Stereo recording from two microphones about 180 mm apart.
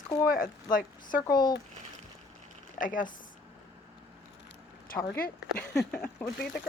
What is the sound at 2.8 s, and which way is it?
Speech, 45° left (ahead or behind).